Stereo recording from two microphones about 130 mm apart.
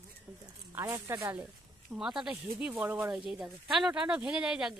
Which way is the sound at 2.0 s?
5° right (ahead or behind).